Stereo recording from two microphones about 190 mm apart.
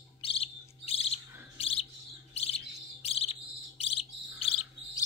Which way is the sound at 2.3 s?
35° left (ahead or behind).